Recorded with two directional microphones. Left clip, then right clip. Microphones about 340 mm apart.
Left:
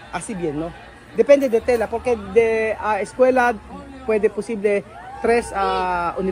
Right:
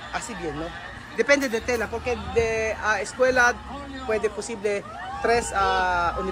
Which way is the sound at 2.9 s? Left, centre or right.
Centre.